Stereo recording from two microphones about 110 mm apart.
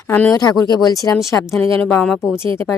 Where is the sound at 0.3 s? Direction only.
35° left (ahead or behind).